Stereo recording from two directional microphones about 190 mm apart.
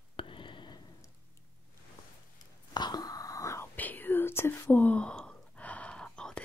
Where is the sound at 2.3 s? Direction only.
20° left (ahead or behind).